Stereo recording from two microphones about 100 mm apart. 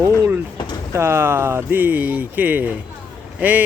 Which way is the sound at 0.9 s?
25° right (ahead or behind).